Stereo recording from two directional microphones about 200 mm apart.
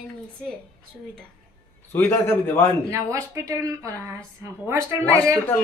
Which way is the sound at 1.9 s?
10° left (ahead or behind).